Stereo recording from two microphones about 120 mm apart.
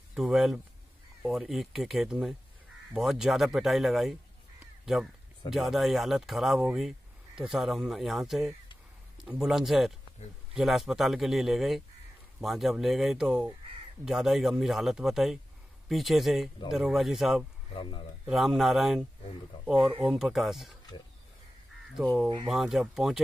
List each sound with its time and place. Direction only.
0.1 s speech: 5° right (ahead or behind)
5.5 s speech: centre (ahead or behind)
17.7 s speech: 40° left (ahead or behind)
18.3 s speech: centre (ahead or behind)
22.0 s speech: 5° right (ahead or behind)